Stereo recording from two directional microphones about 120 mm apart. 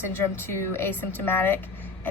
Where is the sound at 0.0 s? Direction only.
20° left (ahead or behind).